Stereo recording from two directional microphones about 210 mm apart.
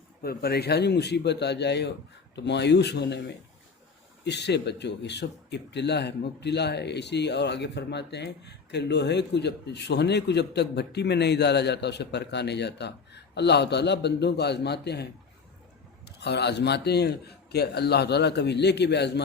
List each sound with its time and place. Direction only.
0.2 s a man's voice: 45° left (ahead or behind)
16.0 s a man's voice: 55° left (ahead or behind)